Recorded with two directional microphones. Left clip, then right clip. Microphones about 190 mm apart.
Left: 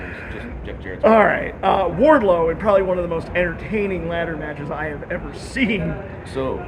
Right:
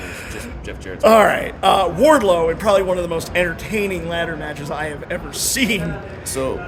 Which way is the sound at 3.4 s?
40° right (ahead or behind).